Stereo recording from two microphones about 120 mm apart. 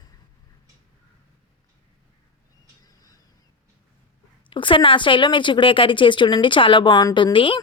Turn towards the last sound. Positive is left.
turn(degrees=45)  # may be behind; listen again after turning